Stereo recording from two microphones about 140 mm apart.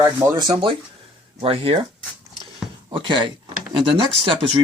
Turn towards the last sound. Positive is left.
turn(degrees=-40)  # may be behind; listen again after turning